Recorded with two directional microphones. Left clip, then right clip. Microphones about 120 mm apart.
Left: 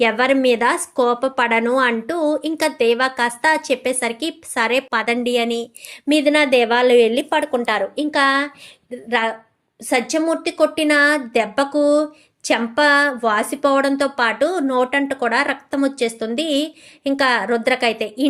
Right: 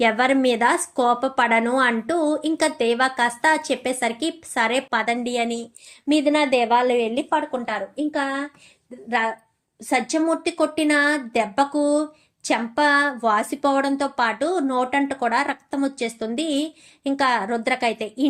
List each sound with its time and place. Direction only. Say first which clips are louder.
0.0 s a woman's voice: left 3 dB; 5° left (ahead or behind)
6.1 s a woman's voice: left 4 dB; 25° left (ahead or behind); by 8.4 s 60° left (ahead or behind)
9.0 s a woman's voice: left 3 dB; 20° left (ahead or behind)